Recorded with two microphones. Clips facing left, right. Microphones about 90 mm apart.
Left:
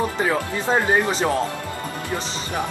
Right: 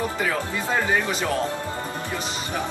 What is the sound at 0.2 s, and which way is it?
Speech, 30° left (ahead or behind).